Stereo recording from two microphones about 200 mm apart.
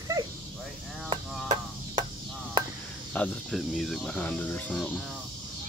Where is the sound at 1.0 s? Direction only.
25° right (ahead or behind).